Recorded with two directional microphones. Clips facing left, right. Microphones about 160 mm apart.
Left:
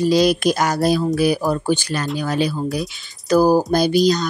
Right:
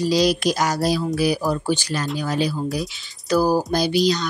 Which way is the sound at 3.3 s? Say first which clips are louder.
Left 4 dB; 45° left (ahead or behind).